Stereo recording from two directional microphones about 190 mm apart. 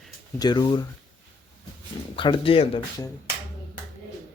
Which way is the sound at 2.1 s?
25° left (ahead or behind).